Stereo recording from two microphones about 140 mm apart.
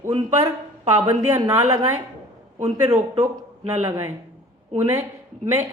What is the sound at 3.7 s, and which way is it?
Speech, 20° right (ahead or behind).